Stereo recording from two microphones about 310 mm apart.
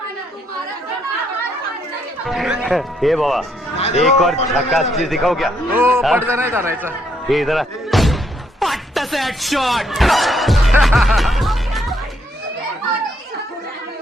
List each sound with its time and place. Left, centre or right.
2.2 s speech: centre
3.8 s a sound: left
4.0 s a man's voice: centre